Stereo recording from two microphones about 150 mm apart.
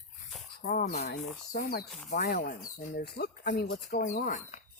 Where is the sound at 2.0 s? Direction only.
60° left (ahead or behind).